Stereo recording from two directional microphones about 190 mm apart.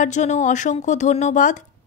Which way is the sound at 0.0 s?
40° left (ahead or behind).